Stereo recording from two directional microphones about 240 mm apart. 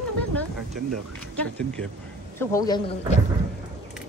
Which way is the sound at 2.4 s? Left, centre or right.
Centre.